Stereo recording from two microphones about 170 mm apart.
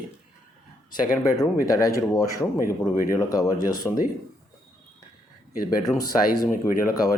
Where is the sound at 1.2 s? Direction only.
20° left (ahead or behind).